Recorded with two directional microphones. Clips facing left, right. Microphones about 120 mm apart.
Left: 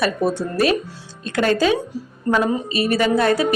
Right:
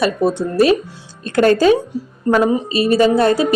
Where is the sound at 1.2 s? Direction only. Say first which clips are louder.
Right 6 dB; 45° right (ahead or behind).